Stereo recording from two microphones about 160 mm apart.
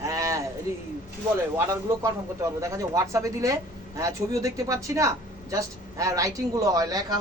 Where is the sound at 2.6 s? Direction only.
20° right (ahead or behind).